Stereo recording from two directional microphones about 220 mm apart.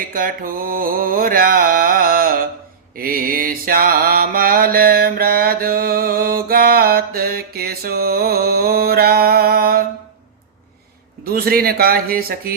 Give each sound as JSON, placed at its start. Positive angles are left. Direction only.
{"t": 0.1, "sound": "mantra", "side_deg": -40}
{"t": 11.3, "sound": "a man's voice", "side_deg": -45}